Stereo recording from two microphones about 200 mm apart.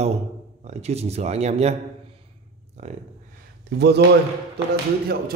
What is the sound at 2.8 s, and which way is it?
Speech, 35° right (ahead or behind).